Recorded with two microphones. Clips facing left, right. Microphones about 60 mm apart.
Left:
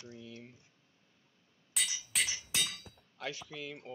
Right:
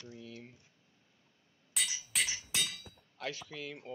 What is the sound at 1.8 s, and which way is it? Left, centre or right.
Music, centre.